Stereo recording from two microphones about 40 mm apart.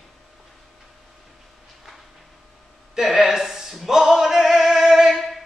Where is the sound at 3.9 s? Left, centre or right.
Centre.